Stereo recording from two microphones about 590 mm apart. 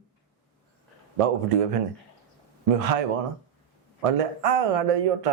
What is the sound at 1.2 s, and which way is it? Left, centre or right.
Speech, right.